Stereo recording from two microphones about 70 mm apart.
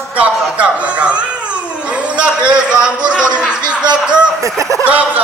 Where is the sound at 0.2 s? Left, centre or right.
Centre.